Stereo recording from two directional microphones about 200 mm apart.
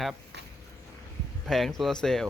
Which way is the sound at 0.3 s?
60° right (ahead or behind).